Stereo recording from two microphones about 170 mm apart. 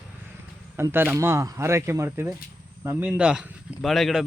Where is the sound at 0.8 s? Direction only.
15° right (ahead or behind).